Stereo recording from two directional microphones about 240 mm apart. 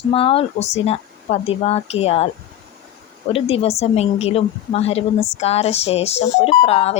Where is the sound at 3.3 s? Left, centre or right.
Left.